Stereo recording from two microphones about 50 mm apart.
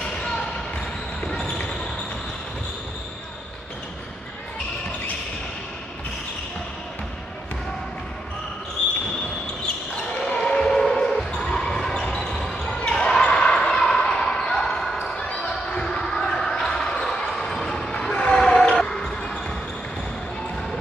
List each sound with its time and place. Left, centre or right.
1.3 s basketball bounce: centre
10.1 s basketball bounce: centre
15.7 s a sound: centre
16.7 s basketball bounce: centre